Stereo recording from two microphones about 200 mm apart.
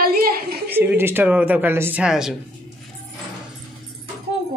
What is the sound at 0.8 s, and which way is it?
A woman's voice, 10° right (ahead or behind).